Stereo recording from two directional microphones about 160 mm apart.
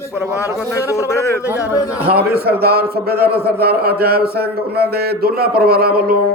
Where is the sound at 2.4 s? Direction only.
75° right (ahead or behind).